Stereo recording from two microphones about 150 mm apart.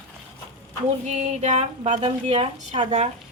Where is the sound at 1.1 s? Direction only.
50° right (ahead or behind).